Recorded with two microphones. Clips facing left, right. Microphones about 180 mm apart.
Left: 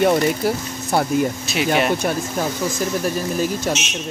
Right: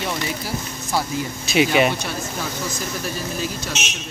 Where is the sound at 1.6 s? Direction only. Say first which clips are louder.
Right 4 dB; 5° right (ahead or behind).